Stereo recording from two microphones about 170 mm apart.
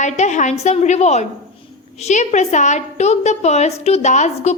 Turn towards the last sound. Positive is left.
turn(degrees=45)  # may be behind; listen again after turning